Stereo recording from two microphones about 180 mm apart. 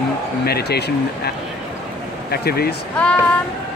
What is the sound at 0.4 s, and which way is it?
Speech, 60° left (ahead or behind).